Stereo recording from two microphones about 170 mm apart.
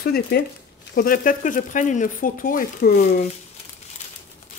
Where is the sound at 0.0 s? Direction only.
65° left (ahead or behind).